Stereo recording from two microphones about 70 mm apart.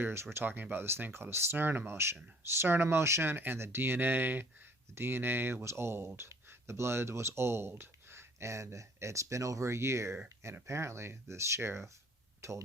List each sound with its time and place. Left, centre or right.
0.0 s speech: right